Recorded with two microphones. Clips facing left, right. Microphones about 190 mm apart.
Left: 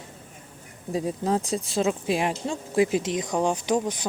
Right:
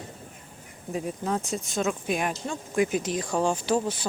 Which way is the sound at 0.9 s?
35° left (ahead or behind).